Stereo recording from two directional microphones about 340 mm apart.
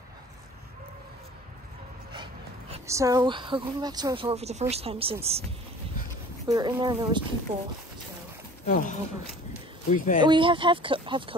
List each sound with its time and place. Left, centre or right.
2.7 s speech: centre
6.4 s speech: centre
8.6 s speech: left
10.2 s speech: centre